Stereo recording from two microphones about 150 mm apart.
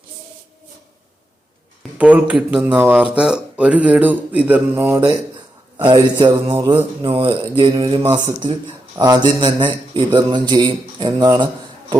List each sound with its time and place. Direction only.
2.0 s speech: 10° right (ahead or behind)
5.7 s a man's voice: 35° right (ahead or behind)